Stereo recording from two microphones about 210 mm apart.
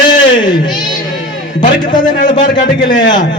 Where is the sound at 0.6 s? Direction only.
20° left (ahead or behind).